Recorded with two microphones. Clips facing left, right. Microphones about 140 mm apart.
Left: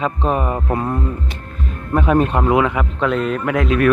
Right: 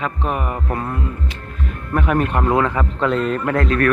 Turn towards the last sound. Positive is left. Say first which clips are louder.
# left 2 dB
turn(degrees=15)  # may be behind; listen again after turning